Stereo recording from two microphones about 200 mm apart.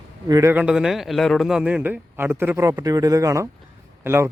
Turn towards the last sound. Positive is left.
turn(degrees=-10)  # may be behind; listen again after turning